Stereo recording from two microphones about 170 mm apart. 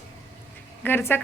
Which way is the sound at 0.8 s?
15° left (ahead or behind).